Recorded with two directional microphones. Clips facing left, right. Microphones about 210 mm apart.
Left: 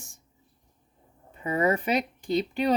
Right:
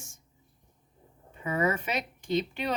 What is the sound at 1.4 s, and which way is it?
Speech, 35° left (ahead or behind).